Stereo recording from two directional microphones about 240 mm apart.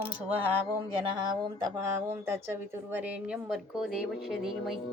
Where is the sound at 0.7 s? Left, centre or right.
Centre.